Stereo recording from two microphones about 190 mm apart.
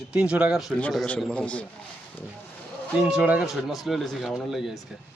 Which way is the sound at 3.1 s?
5° right (ahead or behind).